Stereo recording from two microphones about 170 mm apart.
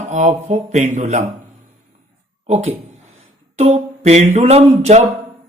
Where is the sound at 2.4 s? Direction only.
40° right (ahead or behind).